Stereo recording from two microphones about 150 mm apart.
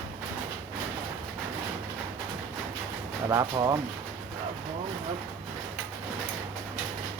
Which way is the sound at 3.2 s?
25° right (ahead or behind).